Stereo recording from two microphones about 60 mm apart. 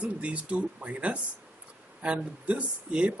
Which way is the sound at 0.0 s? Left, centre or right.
Right.